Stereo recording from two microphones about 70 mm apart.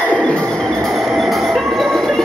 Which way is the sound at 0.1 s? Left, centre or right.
Centre.